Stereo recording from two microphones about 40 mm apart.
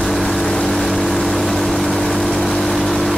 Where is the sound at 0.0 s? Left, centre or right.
Centre.